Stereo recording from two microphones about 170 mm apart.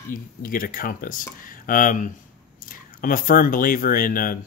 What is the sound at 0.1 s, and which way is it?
Speech, 55° left (ahead or behind).